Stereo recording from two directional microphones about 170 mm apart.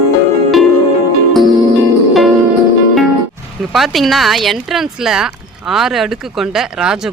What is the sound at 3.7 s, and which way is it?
Speech, centre (ahead or behind).